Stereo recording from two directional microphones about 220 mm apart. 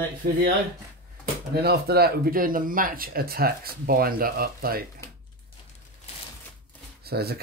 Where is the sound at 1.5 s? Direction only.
45° right (ahead or behind).